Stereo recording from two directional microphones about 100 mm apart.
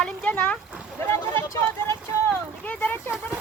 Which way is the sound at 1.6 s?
25° left (ahead or behind).